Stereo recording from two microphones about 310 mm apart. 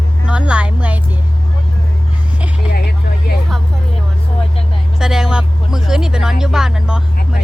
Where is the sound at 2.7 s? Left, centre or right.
Left.